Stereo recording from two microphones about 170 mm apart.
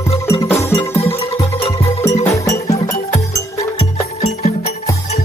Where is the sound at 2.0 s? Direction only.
15° left (ahead or behind).